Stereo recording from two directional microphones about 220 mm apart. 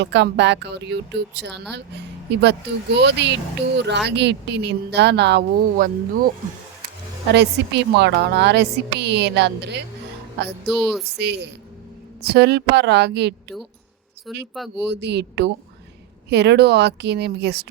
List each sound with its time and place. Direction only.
0.0 s a woman's voice: 50° right (ahead or behind)
7.3 s a woman's voice: 50° right (ahead or behind)
10.7 s a sound: centre (ahead or behind)
11.2 s a woman's voice: 50° right (ahead or behind)
14.3 s a sound: centre (ahead or behind)
14.8 s a woman's voice: 50° right (ahead or behind)